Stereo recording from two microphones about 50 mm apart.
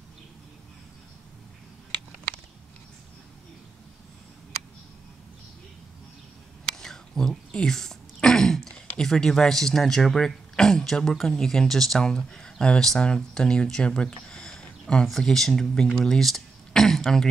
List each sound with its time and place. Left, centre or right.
6.8 s throat clearing: centre
10.5 s speech: centre
14.3 s a sound: centre
15.0 s speech: centre
16.1 s speech: centre